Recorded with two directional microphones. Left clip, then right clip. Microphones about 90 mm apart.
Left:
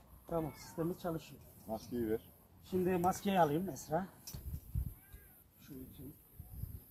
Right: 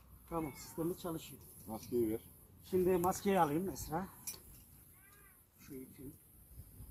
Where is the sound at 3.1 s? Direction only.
20° left (ahead or behind).